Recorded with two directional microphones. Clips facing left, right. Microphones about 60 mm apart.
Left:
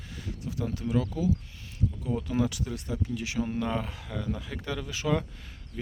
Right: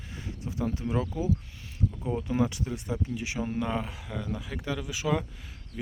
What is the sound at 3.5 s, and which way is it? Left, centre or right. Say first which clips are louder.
Speech: even; centre.